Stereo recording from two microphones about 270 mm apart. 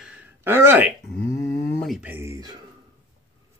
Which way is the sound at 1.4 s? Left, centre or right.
Centre.